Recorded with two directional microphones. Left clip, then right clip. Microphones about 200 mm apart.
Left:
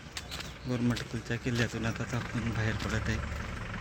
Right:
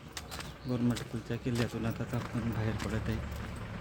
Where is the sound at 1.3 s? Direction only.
Centre (ahead or behind).